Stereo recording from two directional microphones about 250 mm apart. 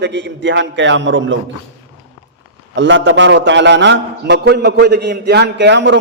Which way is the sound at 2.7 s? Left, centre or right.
Right.